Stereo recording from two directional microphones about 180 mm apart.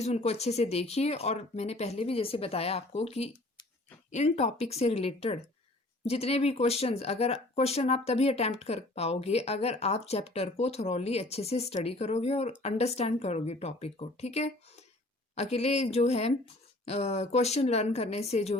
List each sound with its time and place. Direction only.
0.0 s speech: 35° left (ahead or behind)